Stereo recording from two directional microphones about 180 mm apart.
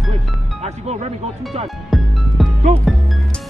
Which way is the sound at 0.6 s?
35° right (ahead or behind).